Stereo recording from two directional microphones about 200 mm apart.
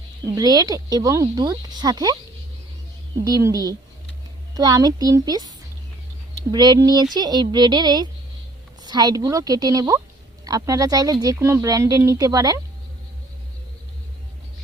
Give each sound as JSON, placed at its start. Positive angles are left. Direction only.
{"t": 0.3, "sound": "speech", "side_deg": -20}
{"t": 3.2, "sound": "speech", "side_deg": -15}